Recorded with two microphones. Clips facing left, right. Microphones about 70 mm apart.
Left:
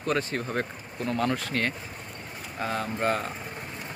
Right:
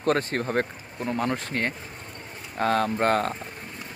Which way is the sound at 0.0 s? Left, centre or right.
Right.